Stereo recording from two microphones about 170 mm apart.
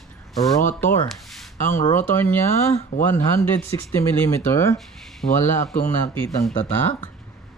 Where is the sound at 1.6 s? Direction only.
50° left (ahead or behind).